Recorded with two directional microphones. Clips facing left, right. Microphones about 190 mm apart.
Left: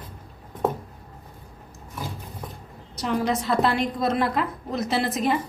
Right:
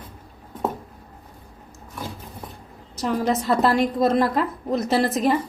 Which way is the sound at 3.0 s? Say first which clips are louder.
Right 2 dB; 45° right (ahead or behind).